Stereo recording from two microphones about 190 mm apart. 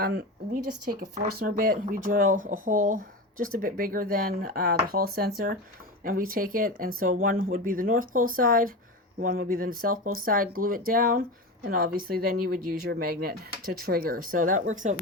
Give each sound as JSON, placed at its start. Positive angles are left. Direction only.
{"t": 0.0, "sound": "speech", "side_deg": -55}